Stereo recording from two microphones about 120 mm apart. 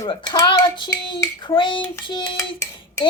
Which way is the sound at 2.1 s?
40° left (ahead or behind).